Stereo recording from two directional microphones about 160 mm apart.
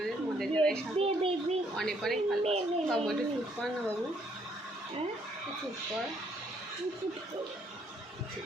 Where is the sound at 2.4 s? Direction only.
40° right (ahead or behind).